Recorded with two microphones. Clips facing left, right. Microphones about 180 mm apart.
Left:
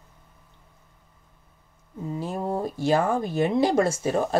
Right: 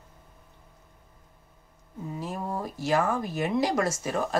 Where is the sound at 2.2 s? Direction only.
30° left (ahead or behind).